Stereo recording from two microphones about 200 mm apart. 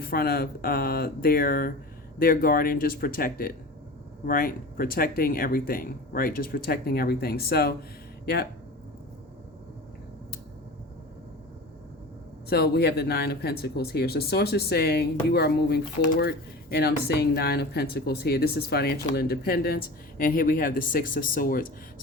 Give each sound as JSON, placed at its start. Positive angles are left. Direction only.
{"t": 0.0, "sound": "speech", "side_deg": 50}
{"t": 12.5, "sound": "speech", "side_deg": 55}